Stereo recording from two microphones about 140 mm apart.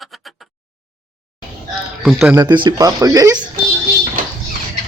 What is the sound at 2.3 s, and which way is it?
Speech, 30° right (ahead or behind).